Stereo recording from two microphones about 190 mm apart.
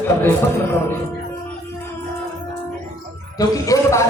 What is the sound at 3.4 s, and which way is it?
Speech, 15° left (ahead or behind).